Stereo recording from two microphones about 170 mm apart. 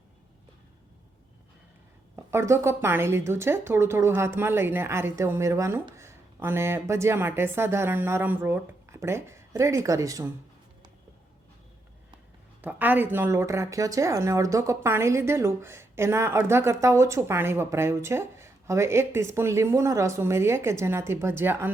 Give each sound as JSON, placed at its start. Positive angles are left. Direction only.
{"t": 2.1, "sound": "a woman's voice", "side_deg": -15}
{"t": 12.6, "sound": "a woman's voice", "side_deg": -10}